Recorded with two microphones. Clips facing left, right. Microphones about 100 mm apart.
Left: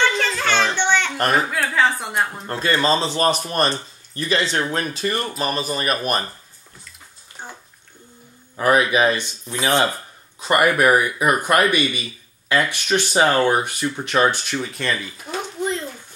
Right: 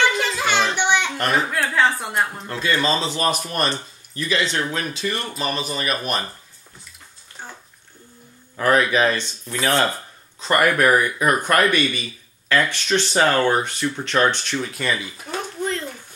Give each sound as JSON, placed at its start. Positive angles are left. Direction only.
{"t": 0.0, "sound": "music", "side_deg": -10}
{"t": 0.7, "sound": "a sound", "side_deg": -10}
{"t": 1.3, "sound": "speech", "side_deg": 0}
{"t": 2.4, "sound": "speech", "side_deg": 40}
{"t": 7.4, "sound": "bathtub", "side_deg": 15}
{"t": 8.5, "sound": "a man's voice", "side_deg": 10}
{"t": 15.2, "sound": "a sound", "side_deg": 15}